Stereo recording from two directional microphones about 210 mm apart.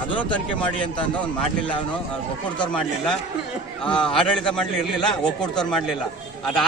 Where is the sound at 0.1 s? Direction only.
5° left (ahead or behind).